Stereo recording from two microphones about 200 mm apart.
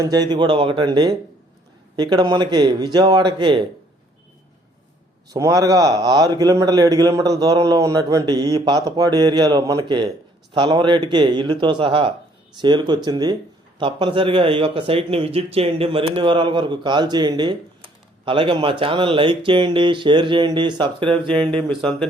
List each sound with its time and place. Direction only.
0.0 s speech: 20° right (ahead or behind)
5.3 s speech: 20° right (ahead or behind)
21.8 s speech: centre (ahead or behind)